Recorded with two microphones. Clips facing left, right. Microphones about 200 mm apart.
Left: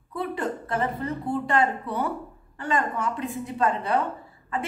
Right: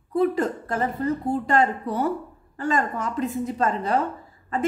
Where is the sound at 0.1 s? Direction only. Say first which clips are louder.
Right 7 dB; 40° right (ahead or behind).